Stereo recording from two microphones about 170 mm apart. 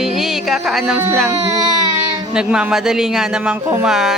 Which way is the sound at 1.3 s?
15° right (ahead or behind).